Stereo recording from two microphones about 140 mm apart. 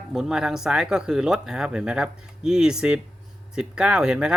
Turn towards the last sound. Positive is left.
turn(degrees=-5)  # may be behind; listen again after turning